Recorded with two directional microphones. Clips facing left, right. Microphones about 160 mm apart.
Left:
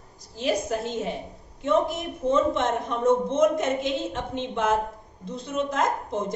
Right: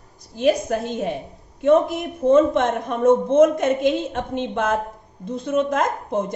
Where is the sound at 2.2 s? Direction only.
55° right (ahead or behind).